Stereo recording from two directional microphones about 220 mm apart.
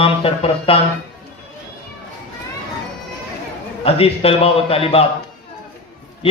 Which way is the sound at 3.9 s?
25° left (ahead or behind).